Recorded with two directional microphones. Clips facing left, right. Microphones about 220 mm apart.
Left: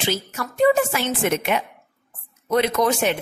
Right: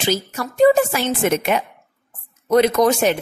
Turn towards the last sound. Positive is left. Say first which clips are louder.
# right 4 dB
turn(degrees=-40)  # may be behind; listen again after turning